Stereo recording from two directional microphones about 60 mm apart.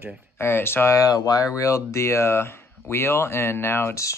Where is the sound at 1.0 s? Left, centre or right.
Left.